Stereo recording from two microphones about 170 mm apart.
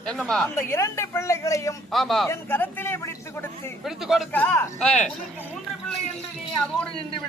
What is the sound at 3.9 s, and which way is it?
Speech, centre (ahead or behind).